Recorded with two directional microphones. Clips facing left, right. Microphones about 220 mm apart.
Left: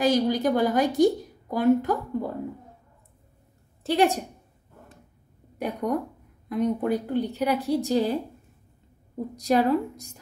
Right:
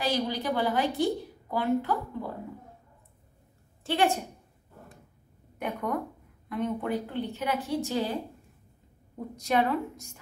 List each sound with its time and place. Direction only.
0.0 s a woman's voice: 45° left (ahead or behind)
3.8 s a woman's voice: 40° left (ahead or behind)
5.6 s a woman's voice: 35° left (ahead or behind)
9.3 s a woman's voice: 35° left (ahead or behind)